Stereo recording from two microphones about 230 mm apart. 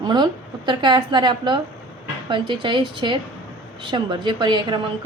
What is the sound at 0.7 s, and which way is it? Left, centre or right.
A woman's voice, centre.